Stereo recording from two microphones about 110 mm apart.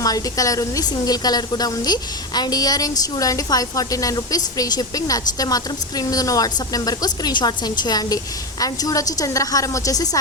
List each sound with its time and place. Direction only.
0.0 s a woman's voice: 35° left (ahead or behind)